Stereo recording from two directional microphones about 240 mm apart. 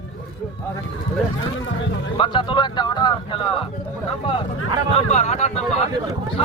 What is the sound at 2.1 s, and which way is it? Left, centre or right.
Speech, left.